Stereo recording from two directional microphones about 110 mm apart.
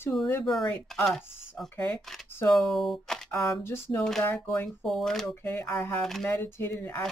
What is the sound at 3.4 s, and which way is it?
Speech, 25° left (ahead or behind).